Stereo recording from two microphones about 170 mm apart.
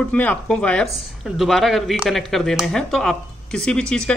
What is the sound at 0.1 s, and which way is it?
Speech, 10° left (ahead or behind).